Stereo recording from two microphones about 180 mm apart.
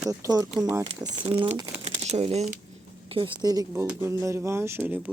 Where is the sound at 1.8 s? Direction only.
35° right (ahead or behind).